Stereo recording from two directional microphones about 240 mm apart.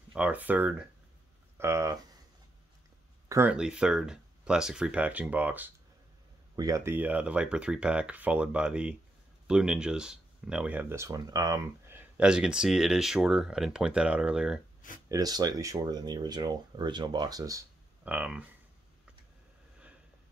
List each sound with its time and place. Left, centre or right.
0.1 s speech: centre
3.3 s speech: centre
15.0 s speech: centre